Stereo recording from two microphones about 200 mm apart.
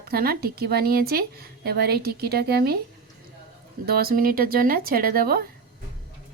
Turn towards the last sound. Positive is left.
turn(degrees=-50)  # may be behind; listen again after turning